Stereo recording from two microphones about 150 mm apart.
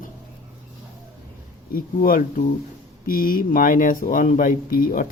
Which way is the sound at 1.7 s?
75° left (ahead or behind).